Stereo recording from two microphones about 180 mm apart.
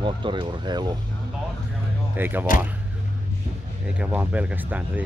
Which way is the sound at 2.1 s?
10° right (ahead or behind).